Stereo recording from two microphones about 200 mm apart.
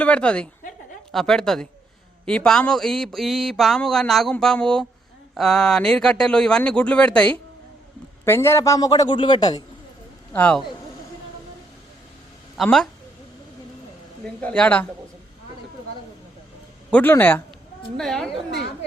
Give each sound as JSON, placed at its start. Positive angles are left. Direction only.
{"t": 0.0, "sound": "a man's voice", "side_deg": 5}
{"t": 10.3, "sound": "a man's voice", "side_deg": 5}
{"t": 12.5, "sound": "speech", "side_deg": 0}
{"t": 14.4, "sound": "a man's voice", "side_deg": 5}
{"t": 16.9, "sound": "a man's voice", "side_deg": 10}